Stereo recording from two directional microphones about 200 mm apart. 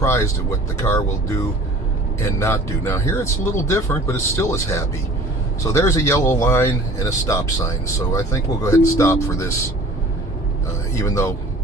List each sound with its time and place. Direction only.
0.0 s speech: 15° left (ahead or behind)
2.4 s speech: 15° left (ahead or behind)
10.9 s speech: 15° left (ahead or behind)